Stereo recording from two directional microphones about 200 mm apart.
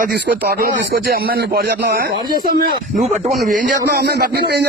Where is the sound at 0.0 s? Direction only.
50° right (ahead or behind).